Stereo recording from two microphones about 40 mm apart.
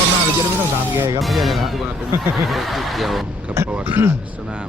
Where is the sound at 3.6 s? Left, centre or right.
Right.